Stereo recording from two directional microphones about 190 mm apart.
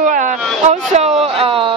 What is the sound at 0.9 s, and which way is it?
Speech, 30° right (ahead or behind).